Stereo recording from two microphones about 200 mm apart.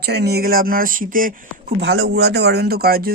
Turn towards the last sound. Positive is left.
turn(degrees=-50)  # may be behind; listen again after turning